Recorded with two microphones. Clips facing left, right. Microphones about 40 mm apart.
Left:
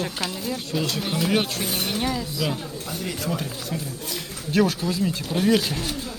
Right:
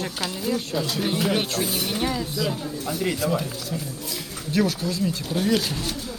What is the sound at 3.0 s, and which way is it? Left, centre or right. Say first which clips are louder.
Speech: right 5 dB; right.